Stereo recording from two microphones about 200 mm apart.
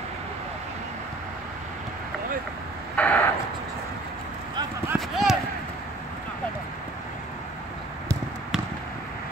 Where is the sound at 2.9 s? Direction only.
5° left (ahead or behind).